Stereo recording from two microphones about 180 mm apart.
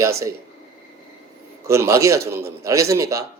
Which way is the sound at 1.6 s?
15° right (ahead or behind).